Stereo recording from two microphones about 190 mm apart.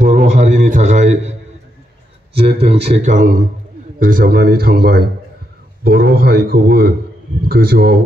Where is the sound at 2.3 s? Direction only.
30° right (ahead or behind); by 8.0 s 55° right (ahead or behind).